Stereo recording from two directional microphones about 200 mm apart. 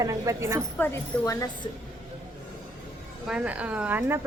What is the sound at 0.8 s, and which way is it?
Speech, 15° left (ahead or behind).